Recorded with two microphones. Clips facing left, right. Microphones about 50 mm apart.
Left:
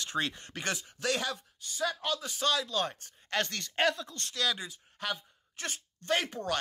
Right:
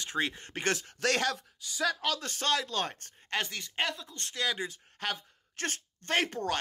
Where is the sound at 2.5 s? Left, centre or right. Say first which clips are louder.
Even; right.